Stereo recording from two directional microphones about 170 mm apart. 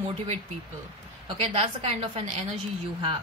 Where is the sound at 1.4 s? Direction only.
35° right (ahead or behind).